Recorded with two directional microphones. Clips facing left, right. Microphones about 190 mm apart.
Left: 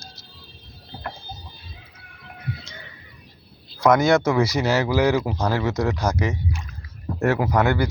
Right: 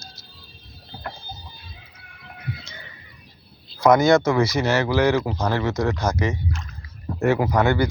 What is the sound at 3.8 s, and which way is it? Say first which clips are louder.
Speech: right 1 dB; centre (ahead or behind).